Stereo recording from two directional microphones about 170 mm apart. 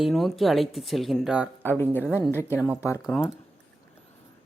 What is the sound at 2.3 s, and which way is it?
Speech, 15° left (ahead or behind).